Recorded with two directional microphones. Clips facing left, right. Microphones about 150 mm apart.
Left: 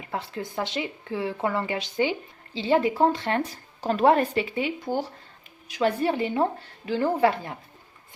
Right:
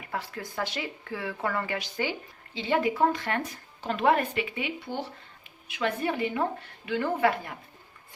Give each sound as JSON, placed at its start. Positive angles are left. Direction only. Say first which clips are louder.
{"t": 0.0, "sound": "speech", "louder": "left 3 dB", "side_deg": 25}